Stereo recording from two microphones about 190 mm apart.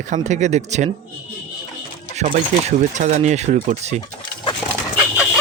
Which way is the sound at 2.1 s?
40° right (ahead or behind).